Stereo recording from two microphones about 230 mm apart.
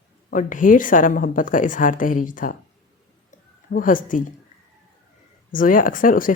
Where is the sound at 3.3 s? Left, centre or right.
Left.